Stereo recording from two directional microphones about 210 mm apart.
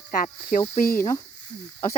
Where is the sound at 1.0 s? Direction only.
15° left (ahead or behind).